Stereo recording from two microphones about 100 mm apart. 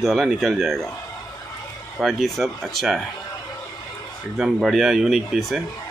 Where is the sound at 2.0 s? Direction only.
Centre (ahead or behind).